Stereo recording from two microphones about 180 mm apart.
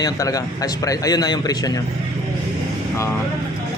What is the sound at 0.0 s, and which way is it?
Speech, 20° left (ahead or behind).